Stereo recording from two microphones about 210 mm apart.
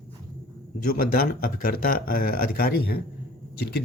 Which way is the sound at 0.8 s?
45° left (ahead or behind).